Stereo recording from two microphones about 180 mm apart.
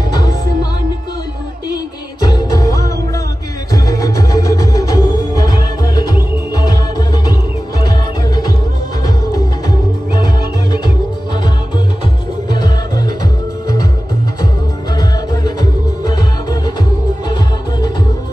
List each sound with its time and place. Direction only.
0.1 s music: 25° left (ahead or behind)
2.2 s music: 20° left (ahead or behind)
6.5 s music: 20° left (ahead or behind)
9.0 s music: 20° left (ahead or behind)
12.4 s music: 25° left (ahead or behind)
15.0 s music: 25° left (ahead or behind)